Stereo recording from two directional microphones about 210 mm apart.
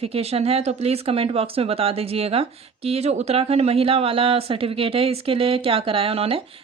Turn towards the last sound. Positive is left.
turn(degrees=-25)  # may be behind; listen again after turning